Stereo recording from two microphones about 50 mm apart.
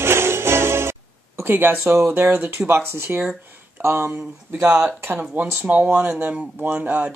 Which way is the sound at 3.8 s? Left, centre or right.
Right.